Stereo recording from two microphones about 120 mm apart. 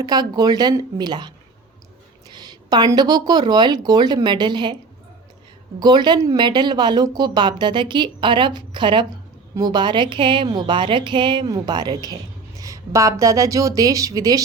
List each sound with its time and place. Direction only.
0.0 s speech: 35° right (ahead or behind)
2.3 s speech: 35° right (ahead or behind)
5.8 s a woman's voice: 35° right (ahead or behind)